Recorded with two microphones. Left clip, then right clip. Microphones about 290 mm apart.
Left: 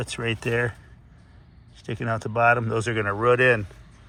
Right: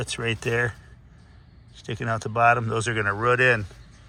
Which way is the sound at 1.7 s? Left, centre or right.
Centre.